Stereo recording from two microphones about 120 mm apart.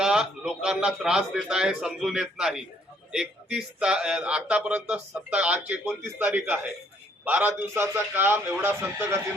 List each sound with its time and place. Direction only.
0.0 s a man's voice: 5° right (ahead or behind)